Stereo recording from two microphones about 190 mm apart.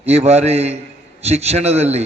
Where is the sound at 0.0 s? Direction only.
35° right (ahead or behind).